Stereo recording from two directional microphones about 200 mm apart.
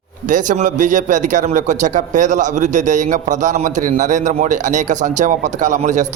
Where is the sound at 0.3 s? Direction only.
40° right (ahead or behind).